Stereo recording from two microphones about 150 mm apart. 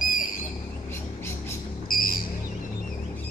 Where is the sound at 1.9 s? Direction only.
70° left (ahead or behind).